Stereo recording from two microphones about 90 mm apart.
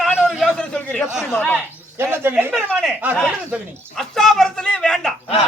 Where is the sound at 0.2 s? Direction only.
Centre (ahead or behind).